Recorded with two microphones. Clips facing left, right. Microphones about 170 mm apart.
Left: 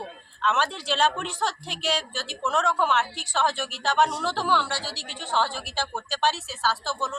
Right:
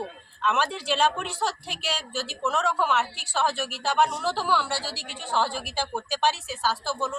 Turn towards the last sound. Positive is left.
turn(degrees=-10)  # may be behind; listen again after turning